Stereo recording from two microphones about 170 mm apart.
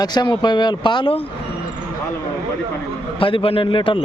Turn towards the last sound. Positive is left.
turn(degrees=30)  # may be behind; listen again after turning